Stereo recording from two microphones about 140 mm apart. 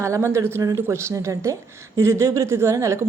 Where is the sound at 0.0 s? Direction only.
20° right (ahead or behind).